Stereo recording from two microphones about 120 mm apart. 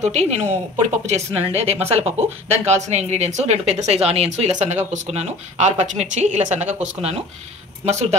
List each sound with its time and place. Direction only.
0.0 s speech: 70° right (ahead or behind)
4.6 s speech: 80° right